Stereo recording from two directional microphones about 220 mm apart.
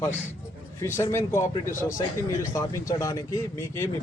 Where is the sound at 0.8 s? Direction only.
10° left (ahead or behind).